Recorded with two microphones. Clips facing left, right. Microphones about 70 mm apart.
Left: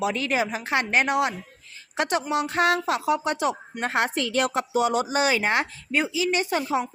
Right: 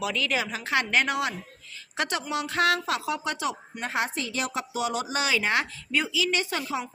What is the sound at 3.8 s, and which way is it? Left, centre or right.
A woman's voice, left.